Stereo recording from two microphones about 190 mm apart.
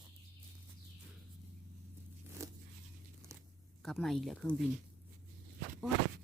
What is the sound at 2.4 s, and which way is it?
Zipper, 15° right (ahead or behind).